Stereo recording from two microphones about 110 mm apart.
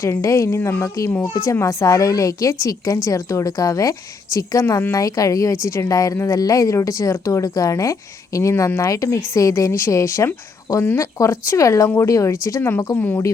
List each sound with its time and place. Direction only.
0.0 s a woman's voice: 30° left (ahead or behind)